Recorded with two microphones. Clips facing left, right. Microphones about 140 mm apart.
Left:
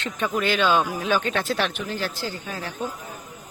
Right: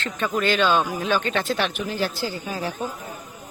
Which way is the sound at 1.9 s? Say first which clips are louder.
Right 3 dB; 10° right (ahead or behind).